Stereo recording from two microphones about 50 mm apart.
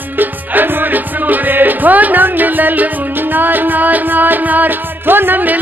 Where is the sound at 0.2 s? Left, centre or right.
Right.